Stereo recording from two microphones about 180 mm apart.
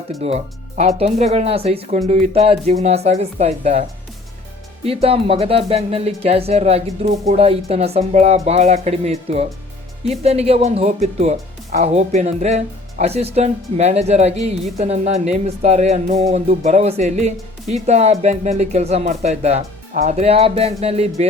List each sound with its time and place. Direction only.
0.2 s speech: 35° right (ahead or behind)
4.9 s speech: 30° right (ahead or behind)